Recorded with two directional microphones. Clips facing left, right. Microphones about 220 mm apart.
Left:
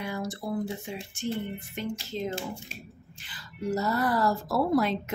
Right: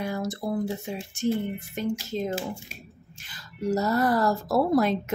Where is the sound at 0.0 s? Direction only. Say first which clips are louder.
Right 4 dB; 40° right (ahead or behind).